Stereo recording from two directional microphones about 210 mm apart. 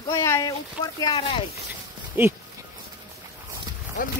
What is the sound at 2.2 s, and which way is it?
Speech, 10° right (ahead or behind).